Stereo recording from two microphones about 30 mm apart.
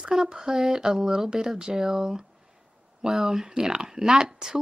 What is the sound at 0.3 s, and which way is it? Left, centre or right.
Speech, centre.